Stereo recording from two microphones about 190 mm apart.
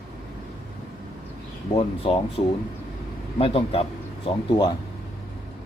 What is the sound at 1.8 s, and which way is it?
Speech, 30° left (ahead or behind).